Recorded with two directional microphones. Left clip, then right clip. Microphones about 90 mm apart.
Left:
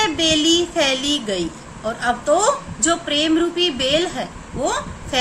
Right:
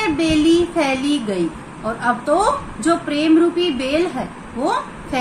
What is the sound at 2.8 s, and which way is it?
A woman's voice, 40° left (ahead or behind).